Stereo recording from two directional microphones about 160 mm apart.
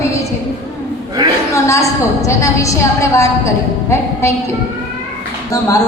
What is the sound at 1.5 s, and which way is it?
A woman's voice, 20° left (ahead or behind).